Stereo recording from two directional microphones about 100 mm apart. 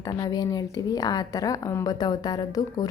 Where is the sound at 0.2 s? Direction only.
40° left (ahead or behind).